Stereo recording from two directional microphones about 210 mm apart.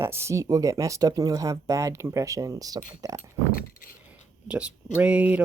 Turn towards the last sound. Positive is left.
turn(degrees=-5)  # may be behind; listen again after turning